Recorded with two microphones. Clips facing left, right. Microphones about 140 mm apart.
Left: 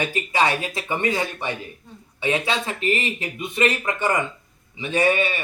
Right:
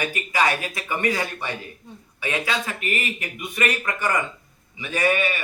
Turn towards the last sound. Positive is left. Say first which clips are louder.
# left 2 dB
turn(degrees=25)  # may be behind; listen again after turning